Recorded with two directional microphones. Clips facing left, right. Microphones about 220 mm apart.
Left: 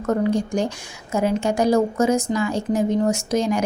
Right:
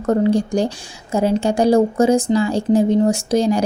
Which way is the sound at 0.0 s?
30° right (ahead or behind).